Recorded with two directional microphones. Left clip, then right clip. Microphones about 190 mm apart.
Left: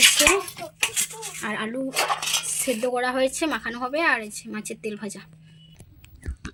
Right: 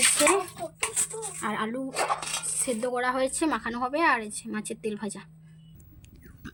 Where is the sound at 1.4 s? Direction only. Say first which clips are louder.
Left 2 dB; 5° left (ahead or behind).